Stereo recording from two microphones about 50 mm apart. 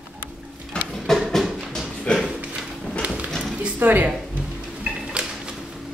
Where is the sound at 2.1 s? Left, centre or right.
Centre.